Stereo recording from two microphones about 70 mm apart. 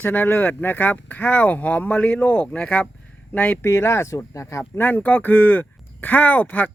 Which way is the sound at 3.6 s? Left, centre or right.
Left.